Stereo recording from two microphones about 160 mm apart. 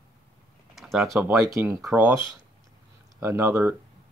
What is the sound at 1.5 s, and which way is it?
Speech, 20° right (ahead or behind).